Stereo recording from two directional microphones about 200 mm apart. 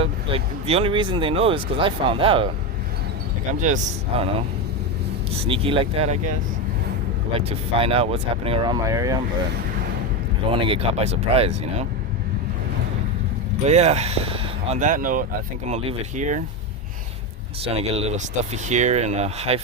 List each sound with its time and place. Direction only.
0.0 s speech: 30° right (ahead or behind)
5.4 s speech: 25° right (ahead or behind)
7.3 s speech: 30° right (ahead or behind)
10.5 s speech: 25° right (ahead or behind)
13.7 s speech: 35° right (ahead or behind)
17.6 s speech: 30° right (ahead or behind)